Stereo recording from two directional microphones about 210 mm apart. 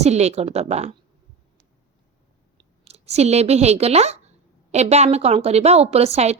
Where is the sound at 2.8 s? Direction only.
30° right (ahead or behind).